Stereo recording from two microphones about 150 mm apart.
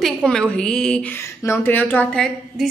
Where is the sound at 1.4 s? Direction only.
15° left (ahead or behind).